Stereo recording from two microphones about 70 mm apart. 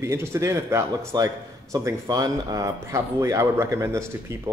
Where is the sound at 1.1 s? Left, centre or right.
Right.